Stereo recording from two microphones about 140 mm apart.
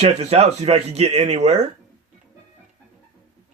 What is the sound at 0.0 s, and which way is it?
Speech, 50° right (ahead or behind).